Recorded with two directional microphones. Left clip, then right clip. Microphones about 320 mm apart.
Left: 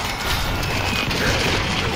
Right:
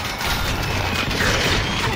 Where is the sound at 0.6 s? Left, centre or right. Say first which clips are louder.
Even; centre.